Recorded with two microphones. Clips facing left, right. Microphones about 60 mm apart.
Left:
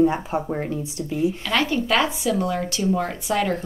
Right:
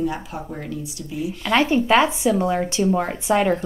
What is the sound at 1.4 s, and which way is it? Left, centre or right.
Speech, right.